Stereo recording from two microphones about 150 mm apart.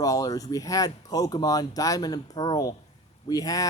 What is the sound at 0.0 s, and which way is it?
Speech, 25° left (ahead or behind).